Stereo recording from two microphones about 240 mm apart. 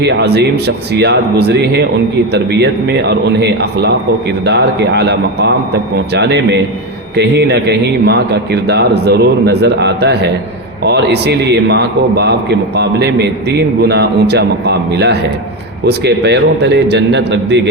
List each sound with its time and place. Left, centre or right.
0.0 s a man's voice: right